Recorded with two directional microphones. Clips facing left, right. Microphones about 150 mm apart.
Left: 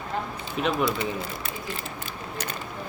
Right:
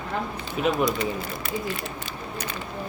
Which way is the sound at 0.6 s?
5° right (ahead or behind).